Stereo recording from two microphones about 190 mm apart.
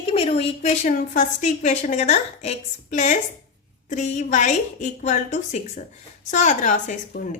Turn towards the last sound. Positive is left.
turn(degrees=40)  # may be behind; listen again after turning